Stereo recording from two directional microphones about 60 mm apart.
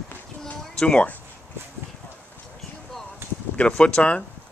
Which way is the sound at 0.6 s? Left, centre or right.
Centre.